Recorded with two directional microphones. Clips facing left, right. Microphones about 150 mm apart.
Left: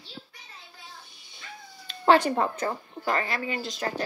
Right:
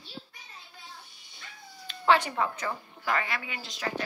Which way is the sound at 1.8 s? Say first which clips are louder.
Left 4 dB; 40° left (ahead or behind).